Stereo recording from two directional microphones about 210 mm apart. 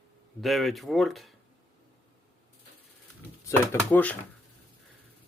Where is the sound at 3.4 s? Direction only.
10° left (ahead or behind).